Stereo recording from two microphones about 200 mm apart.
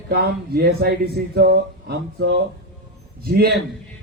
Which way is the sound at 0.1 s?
50° right (ahead or behind).